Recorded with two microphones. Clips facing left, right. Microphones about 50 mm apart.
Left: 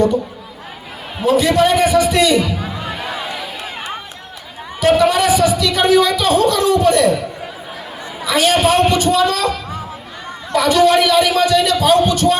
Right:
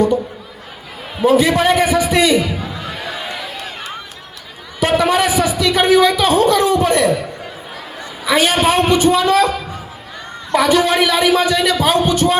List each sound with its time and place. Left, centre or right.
1.3 s speech: right
2.8 s music: centre
4.8 s a sound: right
8.2 s a man's voice: right
10.5 s speech: right